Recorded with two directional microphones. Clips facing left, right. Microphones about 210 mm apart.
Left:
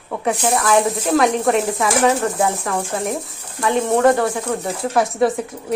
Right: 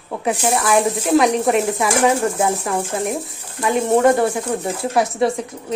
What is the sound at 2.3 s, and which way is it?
A woman's voice, 20° right (ahead or behind).